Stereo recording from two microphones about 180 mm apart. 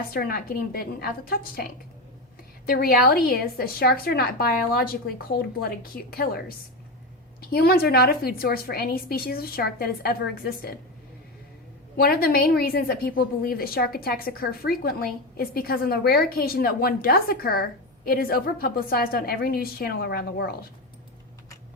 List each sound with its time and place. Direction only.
0.1 s a woman's voice: 55° left (ahead or behind)
7.5 s a woman's voice: 60° left (ahead or behind)
11.9 s a woman's voice: 60° left (ahead or behind)